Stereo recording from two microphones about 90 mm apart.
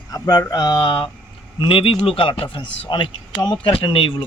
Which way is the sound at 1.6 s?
80° left.